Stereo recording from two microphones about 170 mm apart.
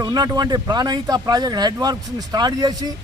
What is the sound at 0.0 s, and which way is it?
A man's voice, 20° right (ahead or behind).